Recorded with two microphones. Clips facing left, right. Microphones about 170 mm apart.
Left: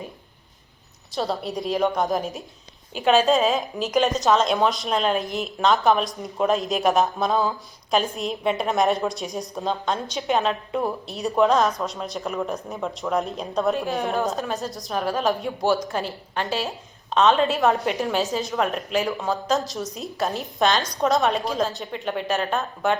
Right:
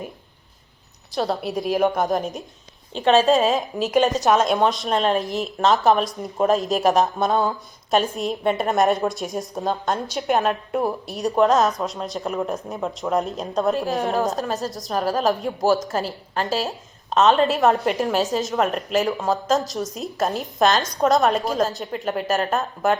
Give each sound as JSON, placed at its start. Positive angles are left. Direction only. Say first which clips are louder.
{"t": 1.1, "sound": "a woman's voice", "louder": "right 3 dB", "side_deg": 0}
{"t": 11.2, "sound": "a woman's voice", "louder": "right 2 dB", "side_deg": 0}
{"t": 15.9, "sound": "a woman's voice", "louder": "right 2 dB", "side_deg": -40}
{"t": 16.6, "sound": "a woman's voice", "louder": "right 2 dB", "side_deg": 0}